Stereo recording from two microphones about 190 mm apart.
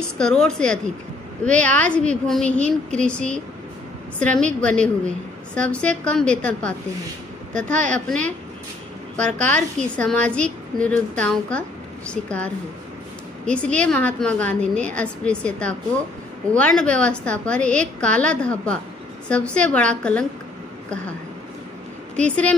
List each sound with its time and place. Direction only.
0.2 s a woman's voice: 5° left (ahead or behind)
4.2 s a woman's voice: 5° left (ahead or behind)
9.5 s a woman's voice: 5° left (ahead or behind)
13.5 s a woman's voice: 5° left (ahead or behind)
22.1 s a woman's voice: 5° left (ahead or behind)